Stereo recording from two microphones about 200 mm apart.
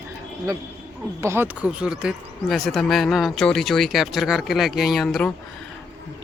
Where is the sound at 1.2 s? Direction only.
10° right (ahead or behind).